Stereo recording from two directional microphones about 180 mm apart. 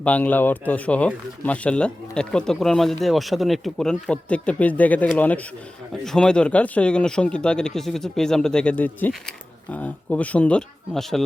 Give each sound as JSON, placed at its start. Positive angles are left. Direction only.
{"t": 0.0, "sound": "speech", "side_deg": 10}